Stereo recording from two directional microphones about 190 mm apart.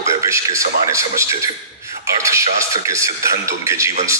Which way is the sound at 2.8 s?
15° right (ahead or behind).